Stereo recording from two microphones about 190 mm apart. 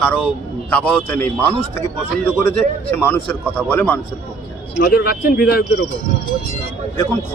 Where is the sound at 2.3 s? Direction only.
10° left (ahead or behind).